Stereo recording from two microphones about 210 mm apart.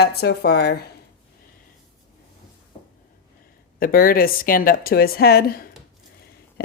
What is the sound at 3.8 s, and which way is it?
Speech, 45° left (ahead or behind).